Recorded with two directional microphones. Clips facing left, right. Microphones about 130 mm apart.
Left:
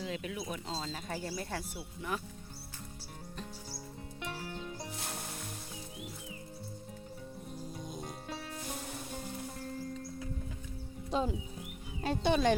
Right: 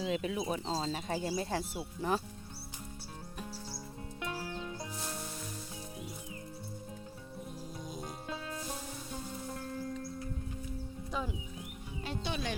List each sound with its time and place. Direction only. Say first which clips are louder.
0.0 s speech: right 5 dB; 30° right (ahead or behind)
7.9 s music: right 2 dB; centre (ahead or behind)
11.1 s speech: left 6 dB; 25° left (ahead or behind)
12.0 s speech: left 9 dB; 50° left (ahead or behind)